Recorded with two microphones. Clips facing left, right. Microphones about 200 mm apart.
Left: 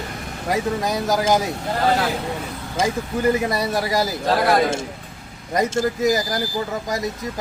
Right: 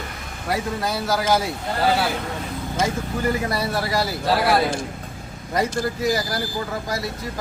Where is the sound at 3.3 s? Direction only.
20° left (ahead or behind).